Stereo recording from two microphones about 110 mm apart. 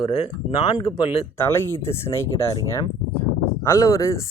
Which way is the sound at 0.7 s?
40° left (ahead or behind).